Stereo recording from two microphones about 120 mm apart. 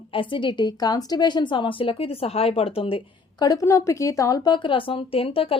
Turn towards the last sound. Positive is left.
turn(degrees=50)  # may be behind; listen again after turning